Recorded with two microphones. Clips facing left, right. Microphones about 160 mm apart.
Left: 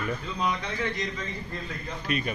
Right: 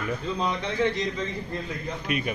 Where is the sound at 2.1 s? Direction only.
10° right (ahead or behind).